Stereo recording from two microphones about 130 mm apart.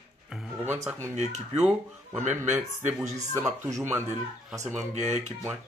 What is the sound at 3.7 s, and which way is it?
Speech, 20° right (ahead or behind).